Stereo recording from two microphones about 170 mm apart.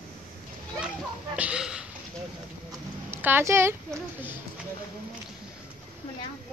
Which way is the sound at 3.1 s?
10° right (ahead or behind).